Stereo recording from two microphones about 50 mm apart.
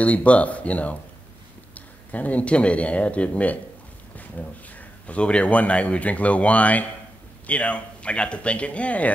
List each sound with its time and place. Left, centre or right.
0.0 s speech: left
2.1 s speech: left